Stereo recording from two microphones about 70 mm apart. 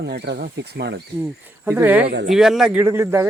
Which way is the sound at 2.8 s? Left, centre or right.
Right.